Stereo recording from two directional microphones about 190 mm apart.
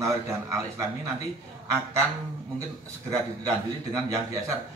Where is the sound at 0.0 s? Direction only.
15° right (ahead or behind).